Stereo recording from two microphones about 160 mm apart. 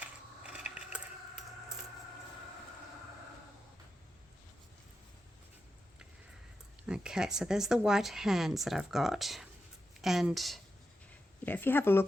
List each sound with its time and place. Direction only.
0.0 s a sound: 5° right (ahead or behind)
6.8 s speech: 5° right (ahead or behind)
11.4 s speech: 10° left (ahead or behind)